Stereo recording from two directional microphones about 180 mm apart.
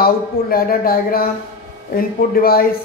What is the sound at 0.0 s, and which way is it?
Speech, 55° left (ahead or behind).